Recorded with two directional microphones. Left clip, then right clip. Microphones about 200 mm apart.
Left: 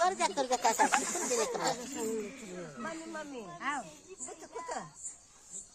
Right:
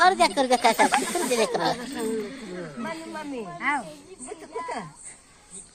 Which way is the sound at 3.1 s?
10° left (ahead or behind).